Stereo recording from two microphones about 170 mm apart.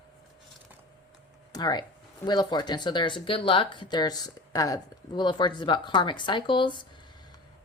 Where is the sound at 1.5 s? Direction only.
25° left (ahead or behind).